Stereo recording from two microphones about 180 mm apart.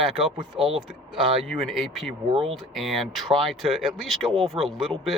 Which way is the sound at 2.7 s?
Centre (ahead or behind).